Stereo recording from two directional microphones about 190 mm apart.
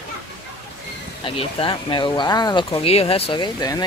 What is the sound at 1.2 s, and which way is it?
Speech, 25° left (ahead or behind).